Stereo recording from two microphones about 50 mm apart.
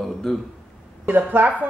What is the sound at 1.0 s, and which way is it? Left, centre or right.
Speech, right.